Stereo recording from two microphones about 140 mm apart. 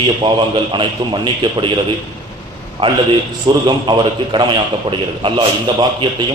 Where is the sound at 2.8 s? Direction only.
35° right (ahead or behind).